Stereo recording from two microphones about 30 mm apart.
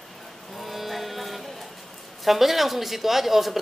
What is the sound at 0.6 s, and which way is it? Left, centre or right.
Sheep, centre.